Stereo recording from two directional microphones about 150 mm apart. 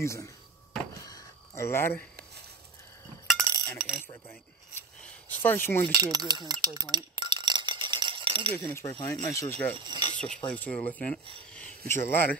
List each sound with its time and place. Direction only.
0.0 s speech: 20° left (ahead or behind)
0.9 s a sound: 25° left (ahead or behind)
3.3 s chink: 20° right (ahead or behind)
3.7 s a sound: 5° right (ahead or behind)
5.4 s speech: 15° left (ahead or behind)
5.9 s chink: 25° right (ahead or behind)
8.5 s speech: 15° left (ahead or behind)
9.8 s speech: 30° right (ahead or behind)
10.1 s speech: 5° left (ahead or behind)